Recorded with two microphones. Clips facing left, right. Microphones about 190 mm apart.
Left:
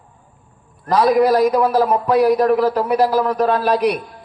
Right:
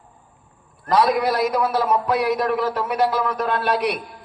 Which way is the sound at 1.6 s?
35° left (ahead or behind).